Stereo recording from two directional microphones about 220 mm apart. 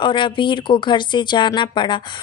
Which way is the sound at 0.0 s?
20° left (ahead or behind).